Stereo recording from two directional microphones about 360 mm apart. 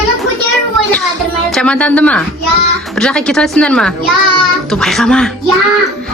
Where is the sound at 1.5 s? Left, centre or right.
Centre.